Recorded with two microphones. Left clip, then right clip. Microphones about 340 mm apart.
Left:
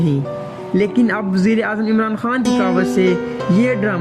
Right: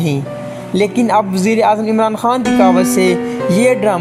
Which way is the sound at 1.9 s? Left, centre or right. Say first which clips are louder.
Right 6 dB; right.